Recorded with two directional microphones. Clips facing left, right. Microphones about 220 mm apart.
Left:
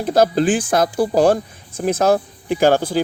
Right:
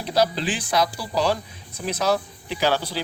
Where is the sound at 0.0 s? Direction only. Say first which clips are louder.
Left 7 dB; 50° left (ahead or behind).